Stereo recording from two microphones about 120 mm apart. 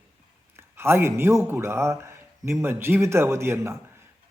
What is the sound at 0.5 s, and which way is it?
A man's voice, 20° right (ahead or behind).